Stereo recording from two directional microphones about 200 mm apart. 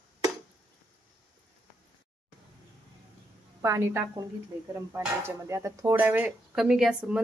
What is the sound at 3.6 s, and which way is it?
Speech, 15° right (ahead or behind).